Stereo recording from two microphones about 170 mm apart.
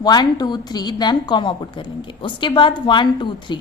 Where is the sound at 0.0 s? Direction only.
25° left (ahead or behind).